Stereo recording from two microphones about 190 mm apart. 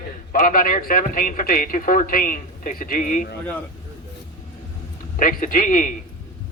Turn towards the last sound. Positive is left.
turn(degrees=45)  # may be behind; listen again after turning